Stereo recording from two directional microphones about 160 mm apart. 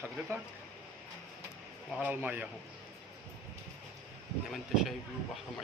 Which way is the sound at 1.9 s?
10° right (ahead or behind).